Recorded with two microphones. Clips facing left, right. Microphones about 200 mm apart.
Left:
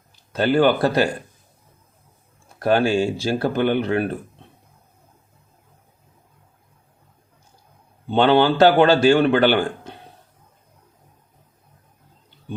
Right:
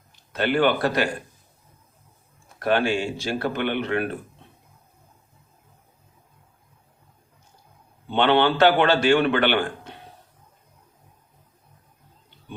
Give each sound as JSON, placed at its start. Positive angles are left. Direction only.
{"t": 0.3, "sound": "a man's voice", "side_deg": 35}
{"t": 2.6, "sound": "a man's voice", "side_deg": 40}
{"t": 8.1, "sound": "a man's voice", "side_deg": 40}